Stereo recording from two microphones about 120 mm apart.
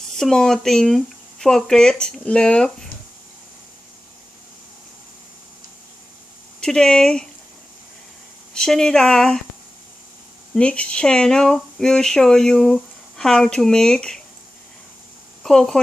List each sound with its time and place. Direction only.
0.2 s speech: 5° left (ahead or behind)
6.6 s speech: 5° left (ahead or behind)
8.5 s speech: 5° left (ahead or behind)
10.5 s speech: 10° left (ahead or behind)
15.4 s speech: 5° left (ahead or behind)